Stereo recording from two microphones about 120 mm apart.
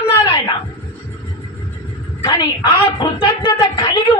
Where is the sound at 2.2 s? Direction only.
35° left (ahead or behind).